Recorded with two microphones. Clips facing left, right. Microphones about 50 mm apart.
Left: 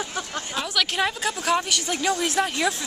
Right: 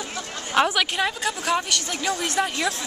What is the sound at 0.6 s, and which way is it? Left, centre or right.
Speech, right.